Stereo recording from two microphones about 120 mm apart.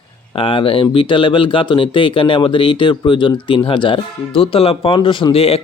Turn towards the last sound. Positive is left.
turn(degrees=55)  # may be behind; listen again after turning